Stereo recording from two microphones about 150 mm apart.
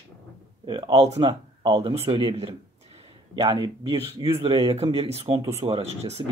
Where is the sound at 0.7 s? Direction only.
35° right (ahead or behind).